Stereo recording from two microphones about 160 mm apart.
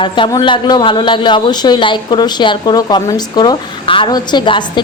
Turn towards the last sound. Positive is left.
turn(degrees=30)  # may be behind; listen again after turning